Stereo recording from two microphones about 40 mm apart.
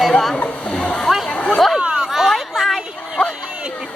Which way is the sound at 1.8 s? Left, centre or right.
Right.